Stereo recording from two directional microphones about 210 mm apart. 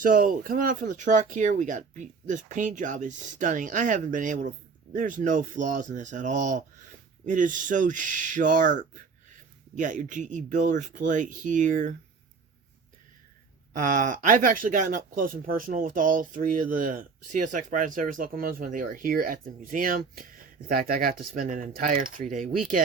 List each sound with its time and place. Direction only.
0.0 s speech: 40° right (ahead or behind)
13.7 s speech: 40° right (ahead or behind)